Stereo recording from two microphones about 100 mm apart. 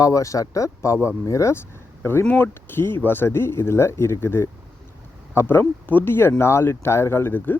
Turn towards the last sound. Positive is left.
turn(degrees=20)  # may be behind; listen again after turning